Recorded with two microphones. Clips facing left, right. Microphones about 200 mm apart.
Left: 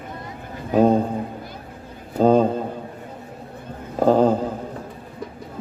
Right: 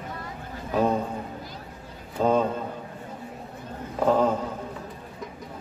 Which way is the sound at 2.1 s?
35° left (ahead or behind).